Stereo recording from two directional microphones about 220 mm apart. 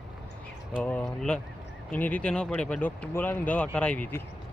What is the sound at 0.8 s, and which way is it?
Speech, 5° left (ahead or behind).